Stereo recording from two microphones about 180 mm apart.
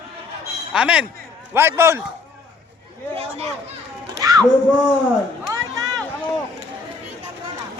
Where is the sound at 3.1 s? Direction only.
35° right (ahead or behind).